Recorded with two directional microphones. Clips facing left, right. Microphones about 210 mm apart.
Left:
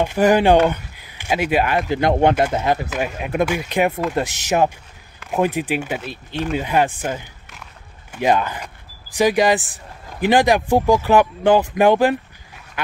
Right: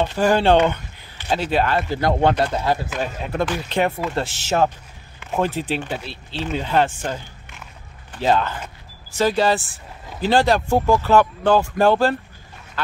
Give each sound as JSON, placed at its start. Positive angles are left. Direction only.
{"t": 0.0, "sound": "speech", "side_deg": 15}